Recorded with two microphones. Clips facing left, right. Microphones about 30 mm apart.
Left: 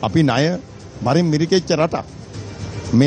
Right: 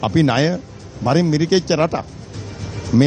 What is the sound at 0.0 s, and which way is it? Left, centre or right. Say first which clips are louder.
A man's voice: even; centre.